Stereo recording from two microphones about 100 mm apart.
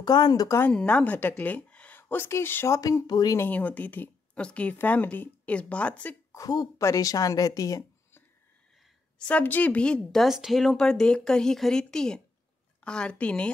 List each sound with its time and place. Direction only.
0.0 s speech: 45° left (ahead or behind)
0.6 s a woman's voice: 15° left (ahead or behind); by 3.3 s 40° left (ahead or behind)
3.3 s speech: 15° left (ahead or behind)
6.3 s speech: 40° left (ahead or behind)
9.3 s speech: 15° left (ahead or behind)
10.2 s speech: 5° right (ahead or behind)